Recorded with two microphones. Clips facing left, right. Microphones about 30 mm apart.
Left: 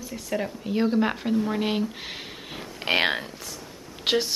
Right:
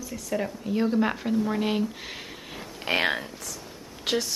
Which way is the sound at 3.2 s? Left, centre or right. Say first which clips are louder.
Left 1 dB; centre.